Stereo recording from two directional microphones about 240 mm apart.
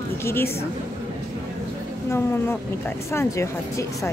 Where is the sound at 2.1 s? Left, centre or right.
Centre.